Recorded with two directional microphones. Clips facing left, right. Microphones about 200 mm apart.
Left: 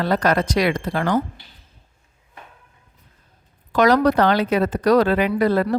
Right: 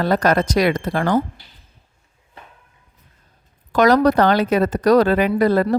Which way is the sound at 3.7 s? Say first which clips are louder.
Right 2 dB; 45° right (ahead or behind).